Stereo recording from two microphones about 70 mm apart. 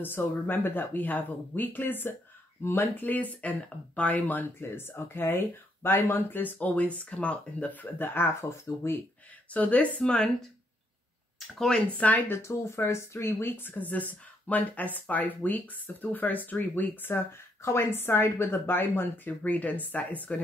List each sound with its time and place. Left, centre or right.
0.0 s speech: left
9.5 s speech: left
11.3 s speech: centre
12.0 s speech: left
12.4 s speech: left